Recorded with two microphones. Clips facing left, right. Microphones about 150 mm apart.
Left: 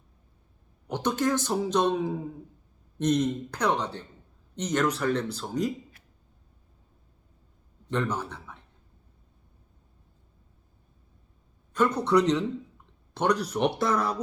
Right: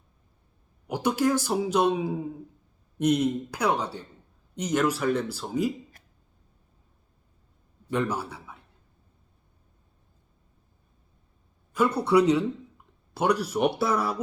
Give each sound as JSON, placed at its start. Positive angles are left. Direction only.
{"t": 0.9, "sound": "speech", "side_deg": -10}
{"t": 7.9, "sound": "a man's voice", "side_deg": -10}
{"t": 11.7, "sound": "a man's voice", "side_deg": -10}